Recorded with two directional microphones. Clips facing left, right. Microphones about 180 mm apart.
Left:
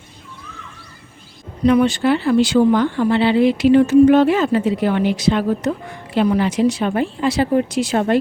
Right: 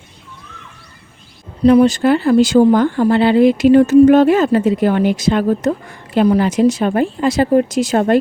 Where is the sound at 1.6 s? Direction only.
35° right (ahead or behind).